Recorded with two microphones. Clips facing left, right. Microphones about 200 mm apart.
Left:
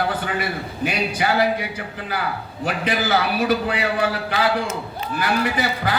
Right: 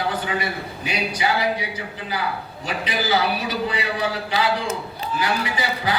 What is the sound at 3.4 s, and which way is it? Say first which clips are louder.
A man's voice: left 5 dB; 55° left (ahead or behind).